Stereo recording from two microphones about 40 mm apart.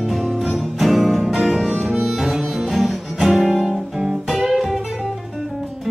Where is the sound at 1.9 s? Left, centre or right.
Centre.